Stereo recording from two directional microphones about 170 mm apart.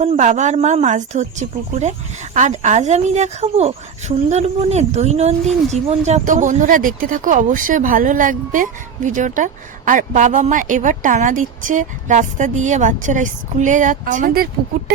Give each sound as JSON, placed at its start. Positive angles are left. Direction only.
{"t": 0.0, "sound": "speech", "side_deg": -45}